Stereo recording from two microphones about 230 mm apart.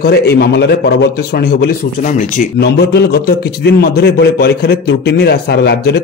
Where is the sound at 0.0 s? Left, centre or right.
Left.